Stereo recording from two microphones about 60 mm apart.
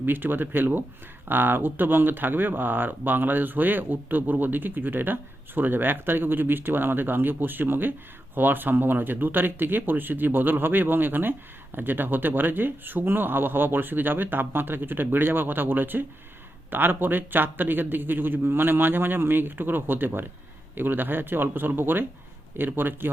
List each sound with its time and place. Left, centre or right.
0.0 s speech: right